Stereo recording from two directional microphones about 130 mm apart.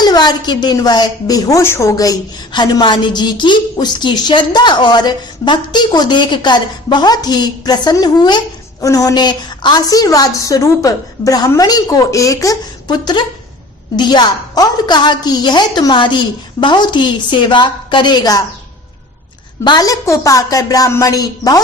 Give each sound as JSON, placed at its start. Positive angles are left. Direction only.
{"t": 0.0, "sound": "a woman's voice", "side_deg": 30}
{"t": 19.6, "sound": "a woman's voice", "side_deg": 30}